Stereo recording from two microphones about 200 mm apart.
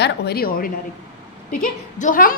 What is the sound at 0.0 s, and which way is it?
A woman's voice, 55° left (ahead or behind).